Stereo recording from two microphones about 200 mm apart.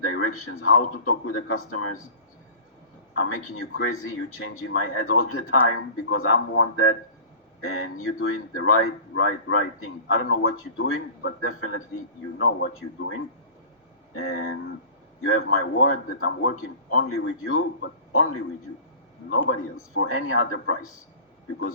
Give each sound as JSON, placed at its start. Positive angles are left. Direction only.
{"t": 0.0, "sound": "speech", "side_deg": 90}
{"t": 3.2, "sound": "speech", "side_deg": 90}
{"t": 12.4, "sound": "a man's voice", "side_deg": 80}
{"t": 14.2, "sound": "speech", "side_deg": 90}
{"t": 15.6, "sound": "a man's voice", "side_deg": 75}